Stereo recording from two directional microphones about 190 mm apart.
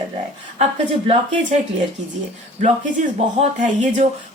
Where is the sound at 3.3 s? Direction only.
40° right (ahead or behind).